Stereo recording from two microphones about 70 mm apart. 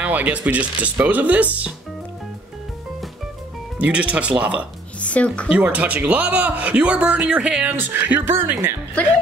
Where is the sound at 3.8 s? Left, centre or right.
Centre.